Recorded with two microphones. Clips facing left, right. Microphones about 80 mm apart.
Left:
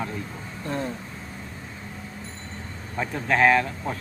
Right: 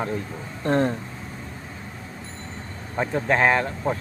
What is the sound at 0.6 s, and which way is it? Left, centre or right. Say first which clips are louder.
Speech: right 8 dB; right.